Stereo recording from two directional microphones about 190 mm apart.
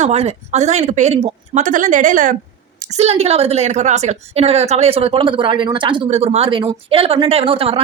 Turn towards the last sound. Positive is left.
turn(degrees=-30)  # may be behind; listen again after turning